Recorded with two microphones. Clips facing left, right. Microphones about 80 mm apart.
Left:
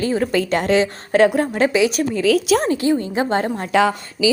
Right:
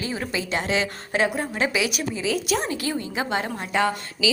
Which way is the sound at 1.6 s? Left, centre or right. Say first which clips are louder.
Left 8 dB; left.